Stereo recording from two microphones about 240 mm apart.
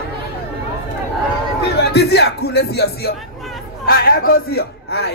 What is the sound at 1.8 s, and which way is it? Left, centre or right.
A man's voice, left.